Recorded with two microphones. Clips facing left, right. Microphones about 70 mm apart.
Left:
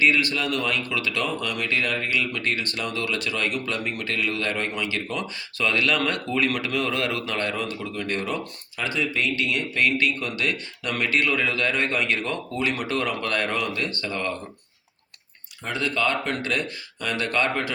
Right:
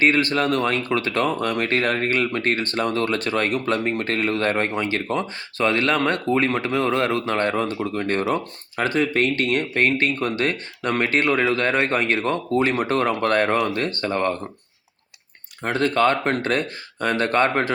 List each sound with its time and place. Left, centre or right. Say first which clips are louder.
0.0 s speech: right 3 dB; right
15.6 s speech: right 6 dB; right